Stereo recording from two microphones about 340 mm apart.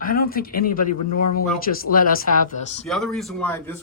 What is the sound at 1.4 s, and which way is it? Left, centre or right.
Speech, left.